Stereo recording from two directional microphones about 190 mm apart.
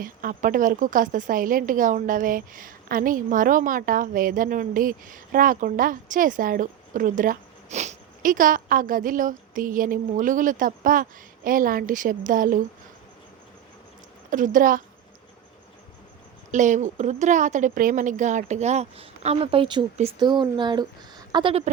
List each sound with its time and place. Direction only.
0.0 s a woman's voice: 45° right (ahead or behind)
14.3 s a woman's voice: 45° right (ahead or behind)
16.5 s a woman's voice: 40° right (ahead or behind); by 21.6 s 25° right (ahead or behind)